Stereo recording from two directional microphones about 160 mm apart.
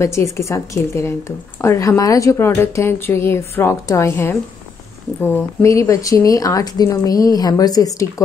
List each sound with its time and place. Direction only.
0.0 s a woman's voice: 20° left (ahead or behind)